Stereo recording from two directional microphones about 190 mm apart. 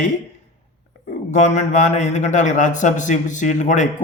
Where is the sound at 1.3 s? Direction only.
35° left (ahead or behind).